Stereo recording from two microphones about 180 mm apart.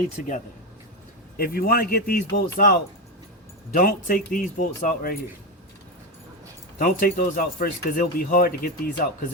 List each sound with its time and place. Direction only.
0.2 s speech: 45° left (ahead or behind)
1.4 s a man's voice: 55° left (ahead or behind)
6.7 s speech: 50° left (ahead or behind)